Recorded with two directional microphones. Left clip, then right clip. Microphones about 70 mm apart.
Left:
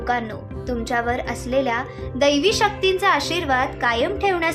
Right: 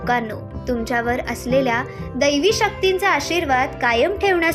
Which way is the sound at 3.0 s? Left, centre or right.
Right.